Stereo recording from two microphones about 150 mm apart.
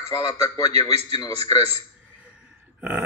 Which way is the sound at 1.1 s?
20° left (ahead or behind).